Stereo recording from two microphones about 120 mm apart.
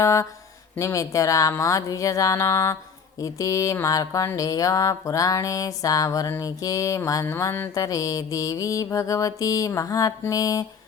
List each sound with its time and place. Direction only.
0.0 s music: 25° left (ahead or behind)